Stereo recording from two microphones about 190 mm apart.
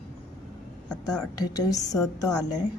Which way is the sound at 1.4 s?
20° left (ahead or behind).